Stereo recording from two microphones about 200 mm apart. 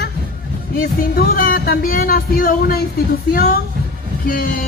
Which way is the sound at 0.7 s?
45° left (ahead or behind).